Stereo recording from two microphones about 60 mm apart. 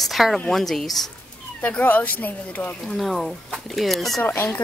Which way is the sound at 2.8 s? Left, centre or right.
Centre.